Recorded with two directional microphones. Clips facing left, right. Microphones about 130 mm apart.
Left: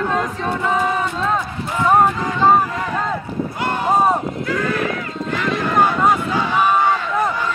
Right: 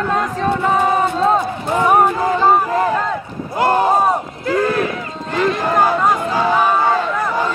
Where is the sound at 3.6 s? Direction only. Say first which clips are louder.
Right 10 dB; 40° right (ahead or behind).